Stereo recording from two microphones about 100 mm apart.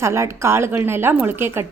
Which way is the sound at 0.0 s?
25° right (ahead or behind).